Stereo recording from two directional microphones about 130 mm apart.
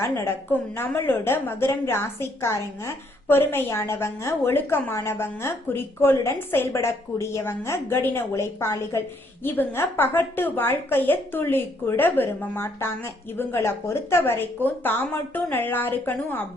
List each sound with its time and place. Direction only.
0.0 s a woman's voice: 20° left (ahead or behind)